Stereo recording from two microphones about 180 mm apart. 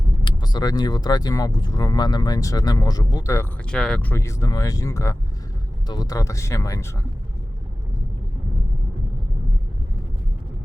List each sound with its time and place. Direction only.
0.3 s speech: 25° left (ahead or behind)
3.7 s speech: 5° left (ahead or behind)